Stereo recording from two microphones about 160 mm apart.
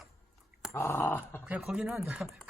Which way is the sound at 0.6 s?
15° left (ahead or behind).